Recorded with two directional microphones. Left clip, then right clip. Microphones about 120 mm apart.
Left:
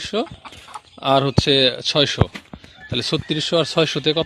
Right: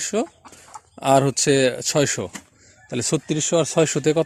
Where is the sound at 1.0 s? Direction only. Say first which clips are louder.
Even; 85° right.